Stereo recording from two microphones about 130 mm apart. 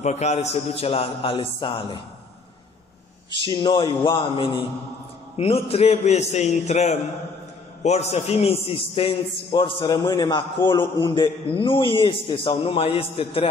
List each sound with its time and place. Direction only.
0.0 s a man's voice: 60° left (ahead or behind)
0.6 s a man's voice: 50° left (ahead or behind)
3.3 s a man's voice: 40° left (ahead or behind)